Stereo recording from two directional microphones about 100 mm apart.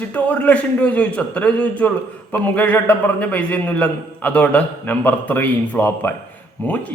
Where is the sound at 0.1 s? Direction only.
15° left (ahead or behind).